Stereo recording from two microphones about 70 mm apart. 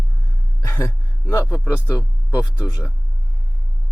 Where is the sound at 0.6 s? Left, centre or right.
Left.